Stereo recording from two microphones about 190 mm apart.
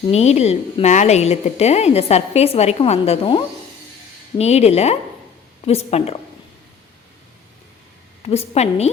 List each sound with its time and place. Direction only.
0.1 s a woman's voice: 35° left (ahead or behind)
8.2 s a woman's voice: 35° left (ahead or behind)